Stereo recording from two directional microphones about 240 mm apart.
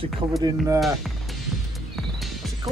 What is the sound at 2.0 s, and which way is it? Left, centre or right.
Music, centre.